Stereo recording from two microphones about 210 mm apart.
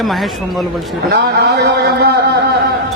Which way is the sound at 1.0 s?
50° right (ahead or behind).